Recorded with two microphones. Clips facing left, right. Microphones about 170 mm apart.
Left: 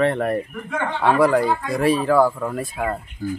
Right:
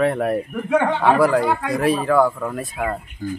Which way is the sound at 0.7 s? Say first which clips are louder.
Right 10 dB; 65° right (ahead or behind).